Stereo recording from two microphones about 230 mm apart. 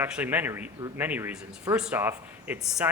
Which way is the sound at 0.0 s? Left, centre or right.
Centre.